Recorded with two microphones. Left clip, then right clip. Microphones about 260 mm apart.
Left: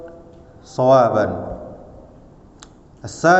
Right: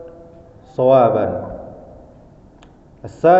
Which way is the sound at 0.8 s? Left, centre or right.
Left.